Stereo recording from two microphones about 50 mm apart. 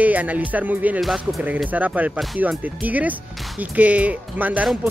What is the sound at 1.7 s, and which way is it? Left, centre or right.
Speech, right.